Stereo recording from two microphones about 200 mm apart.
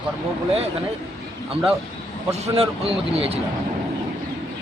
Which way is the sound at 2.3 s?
30° right (ahead or behind).